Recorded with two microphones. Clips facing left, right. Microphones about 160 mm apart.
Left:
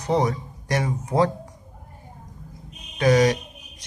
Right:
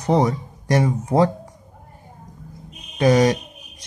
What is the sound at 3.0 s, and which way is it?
Speech, 30° right (ahead or behind).